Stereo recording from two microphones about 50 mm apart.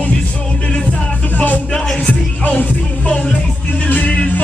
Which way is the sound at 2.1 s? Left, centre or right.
Left.